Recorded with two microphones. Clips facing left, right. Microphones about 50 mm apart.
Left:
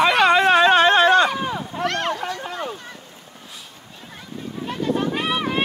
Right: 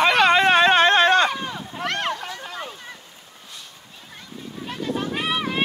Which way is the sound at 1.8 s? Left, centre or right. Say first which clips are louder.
Left 2 dB; centre.